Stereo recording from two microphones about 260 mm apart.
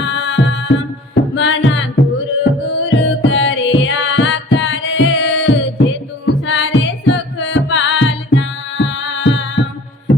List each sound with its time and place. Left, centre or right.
0.0 s music: left